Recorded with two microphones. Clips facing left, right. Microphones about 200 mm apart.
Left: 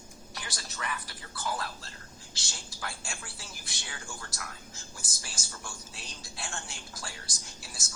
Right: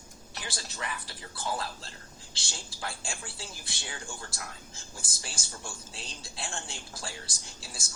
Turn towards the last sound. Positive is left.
turn(degrees=-30)  # may be behind; listen again after turning